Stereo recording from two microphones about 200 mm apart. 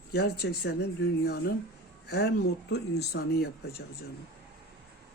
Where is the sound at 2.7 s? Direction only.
55° left (ahead or behind).